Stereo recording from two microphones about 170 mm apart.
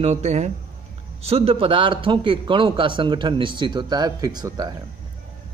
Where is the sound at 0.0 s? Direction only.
40° right (ahead or behind); by 4.7 s 20° right (ahead or behind).